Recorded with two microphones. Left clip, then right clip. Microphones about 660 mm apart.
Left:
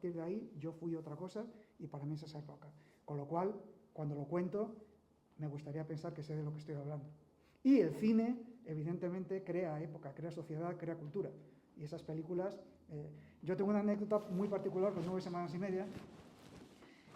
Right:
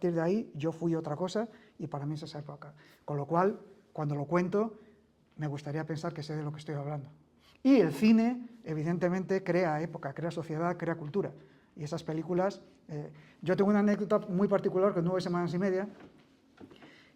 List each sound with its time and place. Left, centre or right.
0.0 s a woman's voice: right